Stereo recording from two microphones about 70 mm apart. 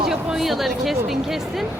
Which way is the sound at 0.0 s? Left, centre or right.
Centre.